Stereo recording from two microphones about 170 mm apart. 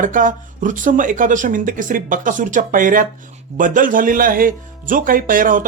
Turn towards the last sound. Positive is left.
turn(degrees=-55)  # may be behind; listen again after turning